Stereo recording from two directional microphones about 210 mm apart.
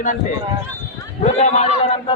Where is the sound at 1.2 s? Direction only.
30° left (ahead or behind).